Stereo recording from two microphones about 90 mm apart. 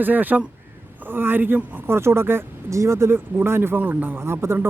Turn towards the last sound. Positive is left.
turn(degrees=-25)  # may be behind; listen again after turning